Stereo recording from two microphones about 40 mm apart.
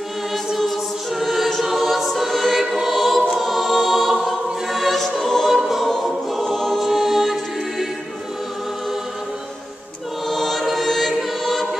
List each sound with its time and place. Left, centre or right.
1.2 s choir: centre
2.6 s music: centre
4.1 s choir: centre
6.4 s choir: centre
6.8 s choir: centre
10.2 s choir: centre